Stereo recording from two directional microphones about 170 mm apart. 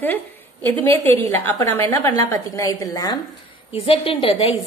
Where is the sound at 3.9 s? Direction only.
30° left (ahead or behind).